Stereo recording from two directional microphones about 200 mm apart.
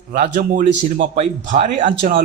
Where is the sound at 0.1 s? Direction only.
40° right (ahead or behind).